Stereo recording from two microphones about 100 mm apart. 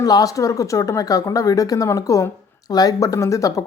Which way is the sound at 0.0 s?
40° left (ahead or behind).